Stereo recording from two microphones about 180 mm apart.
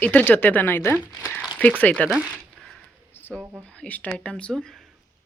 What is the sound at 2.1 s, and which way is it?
Zipper, 5° right (ahead or behind).